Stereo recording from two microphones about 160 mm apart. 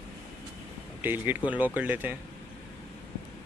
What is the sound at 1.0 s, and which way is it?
Speech, 15° right (ahead or behind).